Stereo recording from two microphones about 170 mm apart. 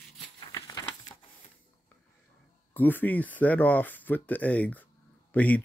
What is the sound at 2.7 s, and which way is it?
Speech, 10° left (ahead or behind).